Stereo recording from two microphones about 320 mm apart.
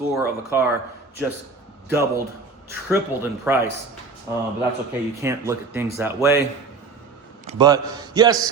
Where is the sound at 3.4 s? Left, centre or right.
Centre.